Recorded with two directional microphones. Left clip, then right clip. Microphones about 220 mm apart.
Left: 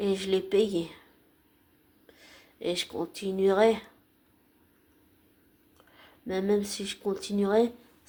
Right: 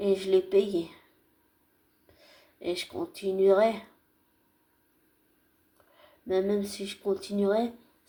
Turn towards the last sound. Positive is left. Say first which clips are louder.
# left 2 dB
turn(degrees=30)  # may be behind; listen again after turning